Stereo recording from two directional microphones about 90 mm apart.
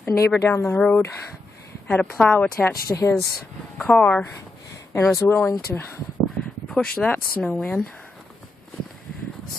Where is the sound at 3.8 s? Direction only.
15° left (ahead or behind).